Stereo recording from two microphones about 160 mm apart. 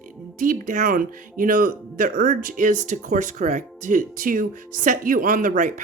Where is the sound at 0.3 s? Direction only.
55° right (ahead or behind).